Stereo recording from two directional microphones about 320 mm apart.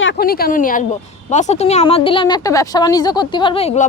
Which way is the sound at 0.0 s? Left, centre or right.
Left.